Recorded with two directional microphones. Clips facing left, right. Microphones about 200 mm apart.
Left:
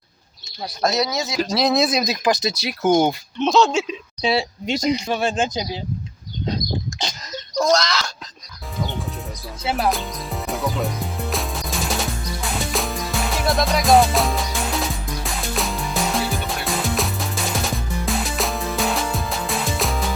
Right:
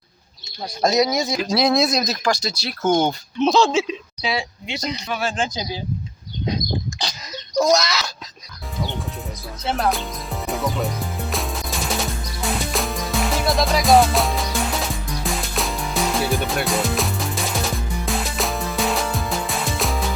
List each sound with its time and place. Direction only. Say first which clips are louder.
0.9 s speech: right 4 dB; 15° right (ahead or behind)
1.3 s speech: right 1 dB; centre (ahead or behind)
2.0 s speech: left 2 dB; 20° left (ahead or behind)
3.4 s speech: even; centre (ahead or behind)
4.2 s speech: left 6 dB; 30° left (ahead or behind)
7.5 s speech: right 1 dB; 10° right (ahead or behind)
9.6 s music: even; 5° left (ahead or behind)